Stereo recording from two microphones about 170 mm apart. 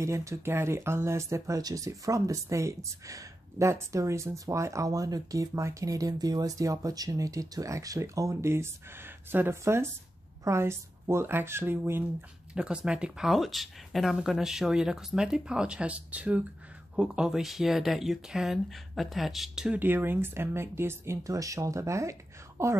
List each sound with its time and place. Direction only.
0.0 s speech: 15° right (ahead or behind)